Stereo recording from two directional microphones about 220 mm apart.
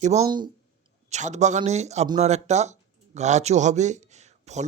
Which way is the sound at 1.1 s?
30° right (ahead or behind).